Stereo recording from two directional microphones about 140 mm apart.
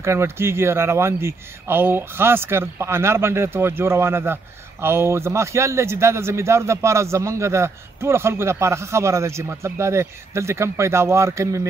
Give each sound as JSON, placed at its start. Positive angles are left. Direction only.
{"t": 0.0, "sound": "speech", "side_deg": -20}